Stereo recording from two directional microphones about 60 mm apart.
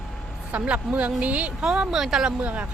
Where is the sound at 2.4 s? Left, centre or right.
Right.